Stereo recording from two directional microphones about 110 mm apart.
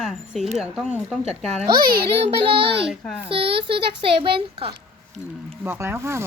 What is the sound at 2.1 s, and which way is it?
A child's voice, 60° right (ahead or behind).